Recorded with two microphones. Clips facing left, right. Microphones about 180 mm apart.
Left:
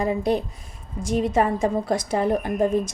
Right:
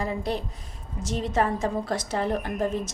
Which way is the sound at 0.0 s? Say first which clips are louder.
Left 6 dB; 15° left (ahead or behind).